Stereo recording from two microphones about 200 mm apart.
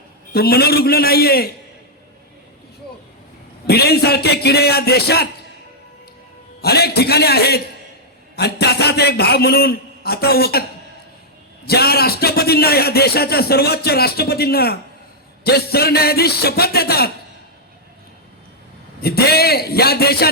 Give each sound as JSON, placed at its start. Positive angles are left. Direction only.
{"t": 0.3, "sound": "speech", "side_deg": 50}
{"t": 3.7, "sound": "speech", "side_deg": 50}
{"t": 6.6, "sound": "speech", "side_deg": 50}
{"t": 11.6, "sound": "speech", "side_deg": 50}
{"t": 19.0, "sound": "speech", "side_deg": 50}